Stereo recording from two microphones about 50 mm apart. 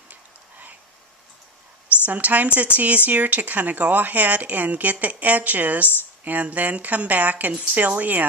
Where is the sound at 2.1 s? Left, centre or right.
Right.